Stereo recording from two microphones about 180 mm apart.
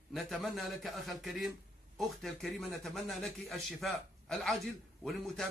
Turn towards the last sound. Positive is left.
turn(degrees=0)  # may be behind; listen again after turning